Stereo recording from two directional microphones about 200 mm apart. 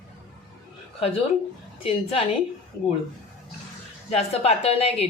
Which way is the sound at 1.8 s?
30° left (ahead or behind).